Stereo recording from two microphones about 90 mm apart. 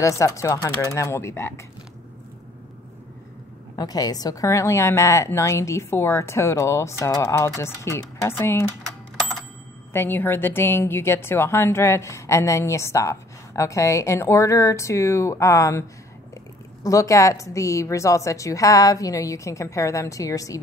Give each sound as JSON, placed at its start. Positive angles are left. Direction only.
{"t": 0.0, "sound": "a woman's voice", "side_deg": 35}
{"t": 3.7, "sound": "a woman's voice", "side_deg": 45}
{"t": 9.9, "sound": "a woman's voice", "side_deg": 25}
{"t": 16.8, "sound": "a woman's voice", "side_deg": 40}